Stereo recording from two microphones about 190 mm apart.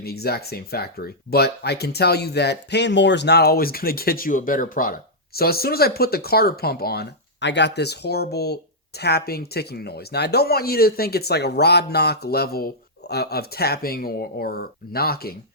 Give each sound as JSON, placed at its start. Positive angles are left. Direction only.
{"t": 0.0, "sound": "speech", "side_deg": 55}